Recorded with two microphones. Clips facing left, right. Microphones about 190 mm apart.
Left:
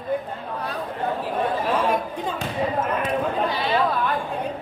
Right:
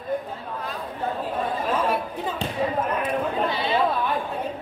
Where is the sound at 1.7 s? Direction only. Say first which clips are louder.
Left 2 dB; 5° right (ahead or behind).